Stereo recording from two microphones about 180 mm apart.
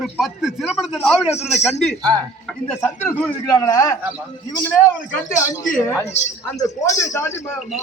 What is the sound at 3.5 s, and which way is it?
Speech, 20° left (ahead or behind).